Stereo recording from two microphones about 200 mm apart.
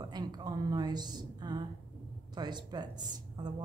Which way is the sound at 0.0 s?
20° right (ahead or behind).